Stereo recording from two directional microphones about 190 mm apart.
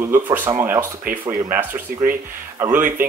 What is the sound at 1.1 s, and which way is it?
Speech, 45° right (ahead or behind).